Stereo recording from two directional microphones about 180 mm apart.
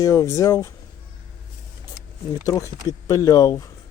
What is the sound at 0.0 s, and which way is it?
Speech, 15° left (ahead or behind).